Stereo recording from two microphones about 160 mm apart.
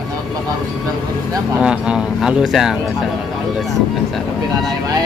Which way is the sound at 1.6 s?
5° right (ahead or behind).